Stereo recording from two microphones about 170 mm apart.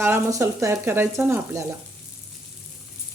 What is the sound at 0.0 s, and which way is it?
Stir, 15° right (ahead or behind).